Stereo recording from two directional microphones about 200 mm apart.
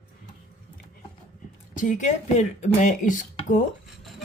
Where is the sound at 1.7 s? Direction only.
40° left (ahead or behind).